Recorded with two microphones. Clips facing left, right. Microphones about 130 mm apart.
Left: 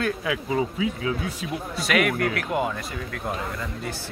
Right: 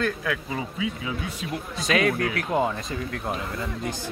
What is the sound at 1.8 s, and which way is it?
Speech, 25° right (ahead or behind).